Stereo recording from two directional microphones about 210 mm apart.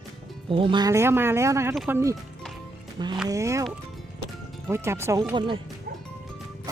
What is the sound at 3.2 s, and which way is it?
Speech, 15° right (ahead or behind).